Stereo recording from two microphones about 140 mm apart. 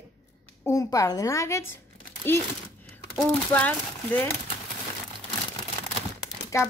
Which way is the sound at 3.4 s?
10° left (ahead or behind).